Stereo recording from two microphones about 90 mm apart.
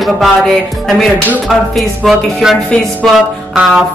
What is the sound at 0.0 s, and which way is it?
Speech, centre (ahead or behind).